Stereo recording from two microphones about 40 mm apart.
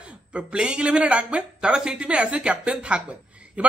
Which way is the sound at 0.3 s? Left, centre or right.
Right.